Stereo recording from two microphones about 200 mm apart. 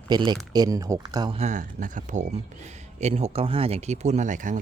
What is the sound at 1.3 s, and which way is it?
Speech, 35° right (ahead or behind).